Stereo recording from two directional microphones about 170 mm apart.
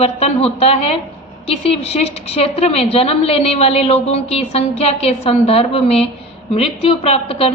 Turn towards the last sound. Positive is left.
turn(degrees=35)  # may be behind; listen again after turning